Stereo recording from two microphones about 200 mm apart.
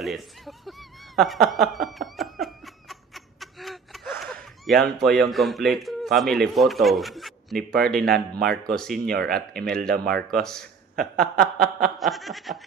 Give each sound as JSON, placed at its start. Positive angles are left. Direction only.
{"t": 0.0, "sound": "chuckle", "side_deg": 0}
{"t": 1.5, "sound": "laughter", "side_deg": 0}
{"t": 4.2, "sound": "a sound", "side_deg": 5}
{"t": 4.9, "sound": "a man's voice", "side_deg": 0}
{"t": 9.1, "sound": "speech", "side_deg": -50}
{"t": 9.7, "sound": "a man's voice", "side_deg": 5}
{"t": 11.3, "sound": "snicker", "side_deg": -45}
{"t": 12.0, "sound": "a man's voice", "side_deg": 0}